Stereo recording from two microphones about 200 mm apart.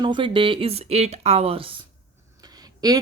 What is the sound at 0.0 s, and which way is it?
Speech, 25° right (ahead or behind).